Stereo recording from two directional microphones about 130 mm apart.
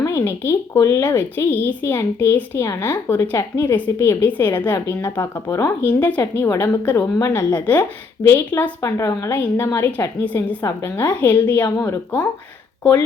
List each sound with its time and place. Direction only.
0.0 s a woman's voice: 25° left (ahead or behind)
8.8 s a woman's voice: 25° left (ahead or behind)